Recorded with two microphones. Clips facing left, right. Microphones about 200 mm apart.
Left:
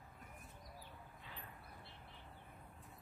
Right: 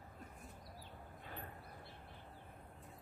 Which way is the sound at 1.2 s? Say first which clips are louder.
Right 7 dB; 50° right (ahead or behind).